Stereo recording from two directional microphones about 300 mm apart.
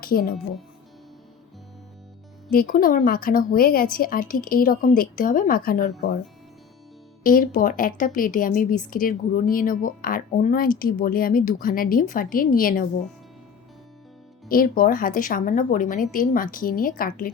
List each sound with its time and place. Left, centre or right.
0.0 s speech: left
2.5 s speech: left
7.3 s speech: left
14.4 s speech: left